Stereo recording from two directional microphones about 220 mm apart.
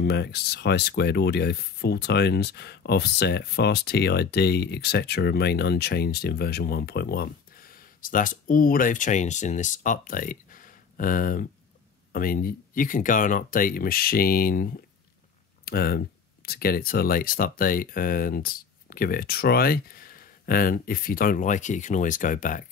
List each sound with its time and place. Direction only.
0.0 s speech: 50° left (ahead or behind)